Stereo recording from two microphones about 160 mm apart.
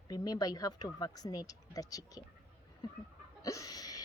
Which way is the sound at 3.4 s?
20° left (ahead or behind).